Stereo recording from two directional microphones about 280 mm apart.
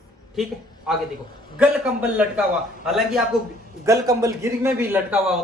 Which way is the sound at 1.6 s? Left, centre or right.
Centre.